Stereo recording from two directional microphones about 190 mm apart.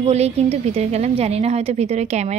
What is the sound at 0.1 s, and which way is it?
A woman's voice, 35° right (ahead or behind).